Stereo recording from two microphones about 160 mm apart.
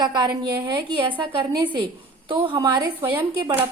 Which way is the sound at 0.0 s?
25° right (ahead or behind).